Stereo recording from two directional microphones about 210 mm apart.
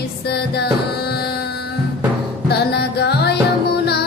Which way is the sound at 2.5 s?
50° left (ahead or behind).